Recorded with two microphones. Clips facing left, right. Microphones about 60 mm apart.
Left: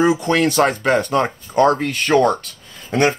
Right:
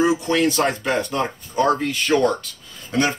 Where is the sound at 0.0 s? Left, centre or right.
Left.